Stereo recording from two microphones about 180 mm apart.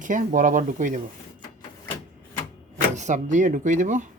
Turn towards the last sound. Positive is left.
turn(degrees=-45)  # may be behind; listen again after turning